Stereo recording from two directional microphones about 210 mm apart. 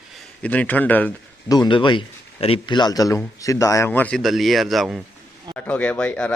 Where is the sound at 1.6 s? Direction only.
25° left (ahead or behind).